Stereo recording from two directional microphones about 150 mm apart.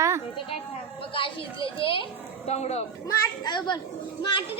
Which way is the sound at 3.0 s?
25° left (ahead or behind).